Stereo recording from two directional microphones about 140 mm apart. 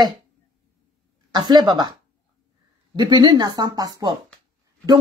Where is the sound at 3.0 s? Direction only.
30° right (ahead or behind).